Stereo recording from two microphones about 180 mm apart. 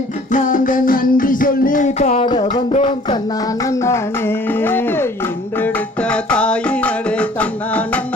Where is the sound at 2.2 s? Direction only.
25° left (ahead or behind).